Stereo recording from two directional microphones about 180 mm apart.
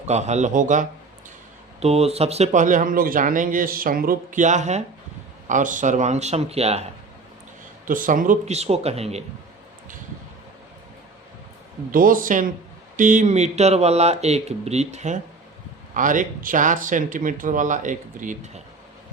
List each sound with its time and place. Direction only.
0.0 s speech: 40° right (ahead or behind)
7.9 s speech: 50° right (ahead or behind)
11.9 s speech: 50° right (ahead or behind)